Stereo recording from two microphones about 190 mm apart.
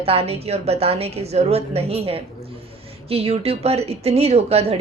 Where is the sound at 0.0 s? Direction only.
30° right (ahead or behind).